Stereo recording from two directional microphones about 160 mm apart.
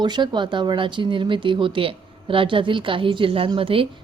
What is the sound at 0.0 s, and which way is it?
A woman's voice, 30° right (ahead or behind).